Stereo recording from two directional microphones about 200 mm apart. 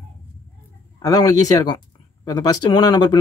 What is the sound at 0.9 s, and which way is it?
Speech, 20° left (ahead or behind).